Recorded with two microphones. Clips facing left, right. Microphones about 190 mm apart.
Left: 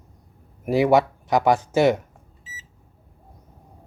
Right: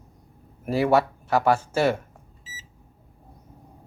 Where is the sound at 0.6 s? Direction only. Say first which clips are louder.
Left 3 dB; 15° left (ahead or behind).